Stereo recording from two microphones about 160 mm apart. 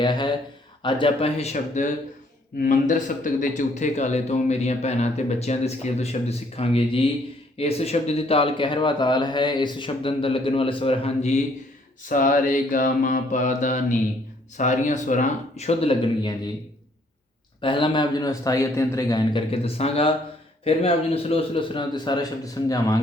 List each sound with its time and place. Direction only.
0.0 s a man's voice: 30° left (ahead or behind); by 1.9 s 45° left (ahead or behind)
2.6 s mantra: 55° left (ahead or behind)
3.4 s speech: 50° left (ahead or behind)
12.0 s mantra: 55° left (ahead or behind)
14.6 s speech: 50° left (ahead or behind); by 16.4 s 30° left (ahead or behind)
17.6 s a man's voice: 30° left (ahead or behind)